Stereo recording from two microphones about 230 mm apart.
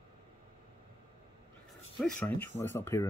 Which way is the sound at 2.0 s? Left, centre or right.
Centre.